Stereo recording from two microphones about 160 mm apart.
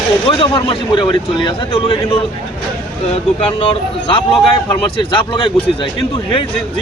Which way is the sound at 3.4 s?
35° left (ahead or behind).